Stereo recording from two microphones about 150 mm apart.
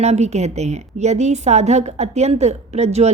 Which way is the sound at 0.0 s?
45° right (ahead or behind).